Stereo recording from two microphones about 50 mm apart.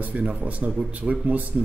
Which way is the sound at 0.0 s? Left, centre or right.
Right.